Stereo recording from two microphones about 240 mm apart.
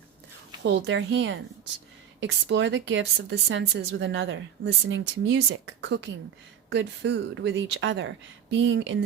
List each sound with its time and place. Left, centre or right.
0.6 s a woman's voice: right